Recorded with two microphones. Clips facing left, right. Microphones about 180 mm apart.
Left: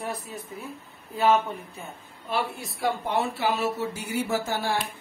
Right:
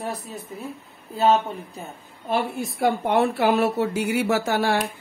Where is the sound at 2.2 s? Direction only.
50° right (ahead or behind).